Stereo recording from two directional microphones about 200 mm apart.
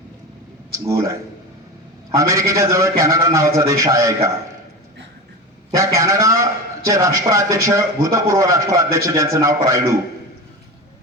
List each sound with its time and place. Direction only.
0.7 s speech: 15° right (ahead or behind)
2.1 s a man's voice: 15° right (ahead or behind)
5.7 s a man's voice: 15° right (ahead or behind)